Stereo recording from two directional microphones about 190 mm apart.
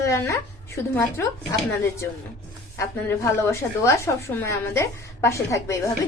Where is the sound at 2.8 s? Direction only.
15° left (ahead or behind).